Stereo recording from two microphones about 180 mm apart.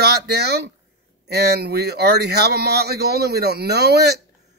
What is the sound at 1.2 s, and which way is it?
Speech, 65° right (ahead or behind).